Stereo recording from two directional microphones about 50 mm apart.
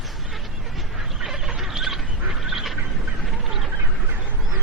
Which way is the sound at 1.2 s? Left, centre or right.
Centre.